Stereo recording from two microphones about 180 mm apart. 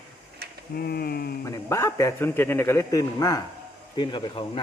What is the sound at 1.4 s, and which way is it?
Speech, 15° left (ahead or behind).